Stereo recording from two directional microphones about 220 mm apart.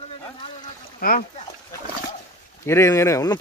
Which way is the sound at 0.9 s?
40° left (ahead or behind).